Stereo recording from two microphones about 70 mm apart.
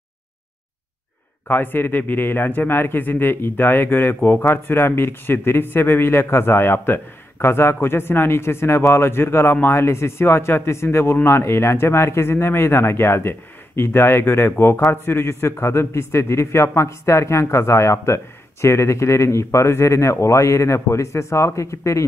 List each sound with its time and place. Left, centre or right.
1.5 s a man's voice: left